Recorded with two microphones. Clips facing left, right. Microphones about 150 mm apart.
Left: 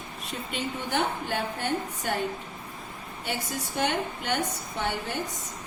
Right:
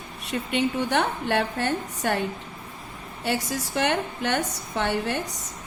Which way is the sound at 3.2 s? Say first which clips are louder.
Right 6 dB; 75° right (ahead or behind).